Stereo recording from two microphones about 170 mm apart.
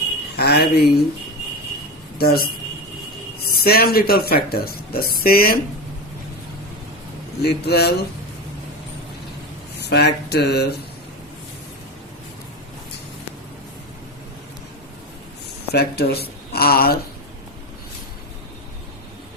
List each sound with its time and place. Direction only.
0.3 s speech: 70° left (ahead or behind)
2.1 s speech: 65° left (ahead or behind)
3.6 s speech: 65° left (ahead or behind)
7.4 s speech: 70° left (ahead or behind)
9.8 s speech: 75° left (ahead or behind)
15.7 s speech: 70° left (ahead or behind)